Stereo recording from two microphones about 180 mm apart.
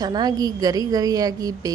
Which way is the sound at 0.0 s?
20° right (ahead or behind).